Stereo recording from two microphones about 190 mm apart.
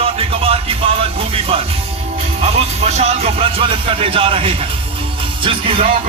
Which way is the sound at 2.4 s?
35° right (ahead or behind).